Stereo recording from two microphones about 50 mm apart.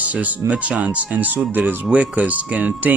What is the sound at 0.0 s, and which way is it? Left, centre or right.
Speech, right.